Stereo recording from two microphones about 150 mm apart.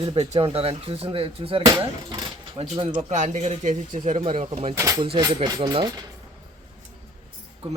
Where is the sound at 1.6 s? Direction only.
25° right (ahead or behind).